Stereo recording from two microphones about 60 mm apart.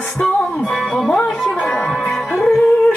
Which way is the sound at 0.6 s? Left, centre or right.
Centre.